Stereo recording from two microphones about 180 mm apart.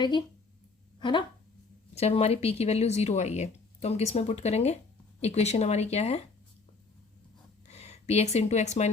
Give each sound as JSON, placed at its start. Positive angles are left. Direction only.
{"t": 0.9, "sound": "speech", "side_deg": 25}
{"t": 7.7, "sound": "speech", "side_deg": 35}